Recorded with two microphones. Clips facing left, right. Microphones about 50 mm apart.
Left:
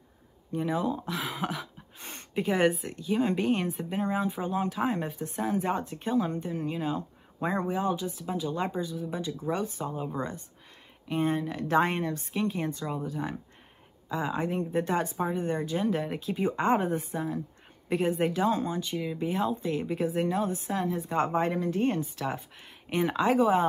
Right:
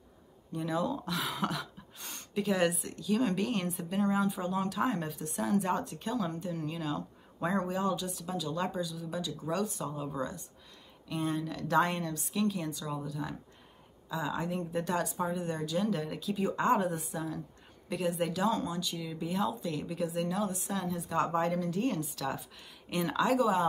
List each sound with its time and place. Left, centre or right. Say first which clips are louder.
0.5 s speech: left 3 dB; left
2.0 s a sound: left 2 dB; left
2.9 s speech: left 3 dB; left